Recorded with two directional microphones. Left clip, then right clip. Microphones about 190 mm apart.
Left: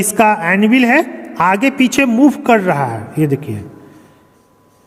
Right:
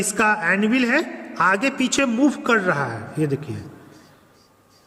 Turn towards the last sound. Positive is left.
turn(degrees=30)  # may be behind; listen again after turning